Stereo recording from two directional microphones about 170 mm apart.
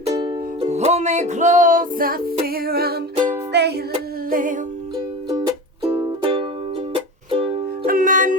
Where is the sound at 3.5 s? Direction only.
75° right (ahead or behind).